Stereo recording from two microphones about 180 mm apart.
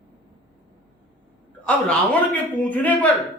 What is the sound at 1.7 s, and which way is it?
A man's voice, 10° left (ahead or behind).